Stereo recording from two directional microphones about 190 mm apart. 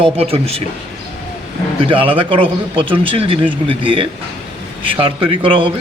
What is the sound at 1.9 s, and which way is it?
A man's voice, 30° right (ahead or behind).